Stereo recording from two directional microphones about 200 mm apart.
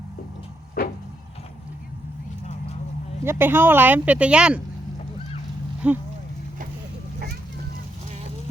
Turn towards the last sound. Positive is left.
turn(degrees=-55)  # may be behind; listen again after turning